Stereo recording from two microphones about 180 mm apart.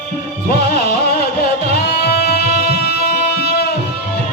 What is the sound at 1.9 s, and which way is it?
Music, 60° left (ahead or behind).